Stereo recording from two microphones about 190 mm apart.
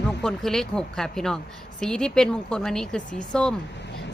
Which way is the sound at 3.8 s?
65° left (ahead or behind).